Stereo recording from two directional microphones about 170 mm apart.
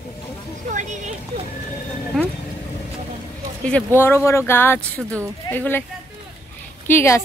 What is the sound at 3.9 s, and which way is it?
Speech, 15° left (ahead or behind).